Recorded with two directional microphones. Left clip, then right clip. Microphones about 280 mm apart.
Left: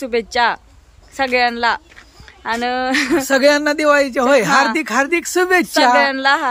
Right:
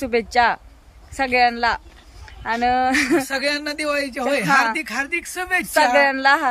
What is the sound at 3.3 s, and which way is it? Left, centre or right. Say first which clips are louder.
Speech: left 10 dB; centre.